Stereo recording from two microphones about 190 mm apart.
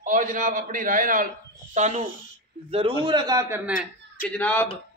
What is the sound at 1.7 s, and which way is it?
A man's voice, 35° right (ahead or behind).